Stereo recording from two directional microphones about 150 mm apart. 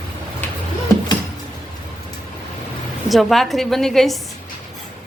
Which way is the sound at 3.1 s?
Centre (ahead or behind).